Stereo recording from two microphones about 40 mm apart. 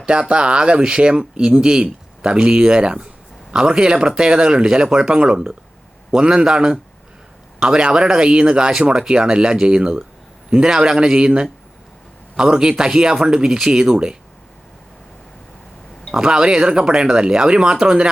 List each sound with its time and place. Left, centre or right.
0.0 s speech: right
16.1 s speech: centre